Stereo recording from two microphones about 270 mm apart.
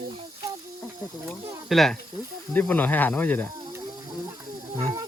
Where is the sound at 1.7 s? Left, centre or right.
Centre.